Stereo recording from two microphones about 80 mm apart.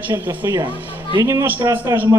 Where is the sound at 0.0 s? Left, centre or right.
Right.